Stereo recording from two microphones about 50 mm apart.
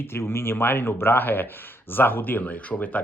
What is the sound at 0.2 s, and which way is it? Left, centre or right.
Speech, left.